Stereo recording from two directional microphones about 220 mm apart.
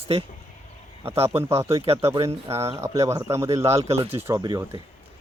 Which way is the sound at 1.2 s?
10° right (ahead or behind).